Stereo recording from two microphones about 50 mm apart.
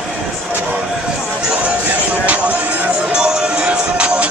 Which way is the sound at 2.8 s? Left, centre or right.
Centre.